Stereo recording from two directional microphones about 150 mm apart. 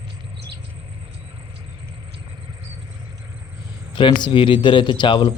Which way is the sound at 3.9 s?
30° left (ahead or behind).